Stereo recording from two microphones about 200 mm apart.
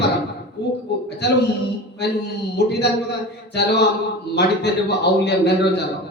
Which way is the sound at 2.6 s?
55° left (ahead or behind).